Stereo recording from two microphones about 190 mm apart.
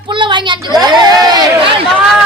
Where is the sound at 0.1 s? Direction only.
25° right (ahead or behind).